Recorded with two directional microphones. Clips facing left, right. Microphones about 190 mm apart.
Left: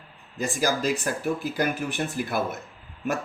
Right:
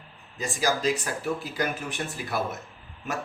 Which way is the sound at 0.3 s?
55° left (ahead or behind).